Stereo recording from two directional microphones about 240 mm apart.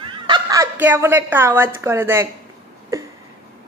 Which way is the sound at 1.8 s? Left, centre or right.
Centre.